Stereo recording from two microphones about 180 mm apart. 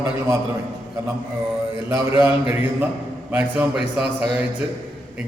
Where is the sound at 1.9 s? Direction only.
15° right (ahead or behind).